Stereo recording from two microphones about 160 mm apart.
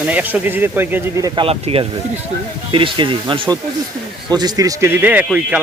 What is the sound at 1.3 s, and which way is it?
Speech, 35° right (ahead or behind).